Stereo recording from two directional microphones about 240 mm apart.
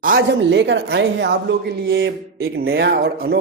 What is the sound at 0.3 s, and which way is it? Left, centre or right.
A woman's voice, right.